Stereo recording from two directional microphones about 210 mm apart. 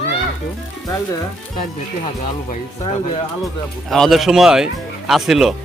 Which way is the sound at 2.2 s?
30° left (ahead or behind).